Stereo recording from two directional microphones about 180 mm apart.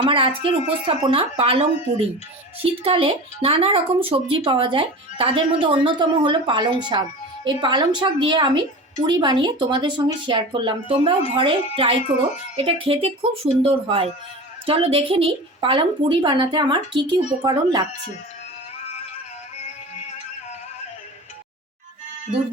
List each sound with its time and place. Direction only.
0.0 s speech: 30° right (ahead or behind)